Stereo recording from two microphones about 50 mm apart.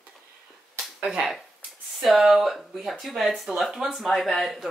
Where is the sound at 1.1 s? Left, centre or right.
Centre.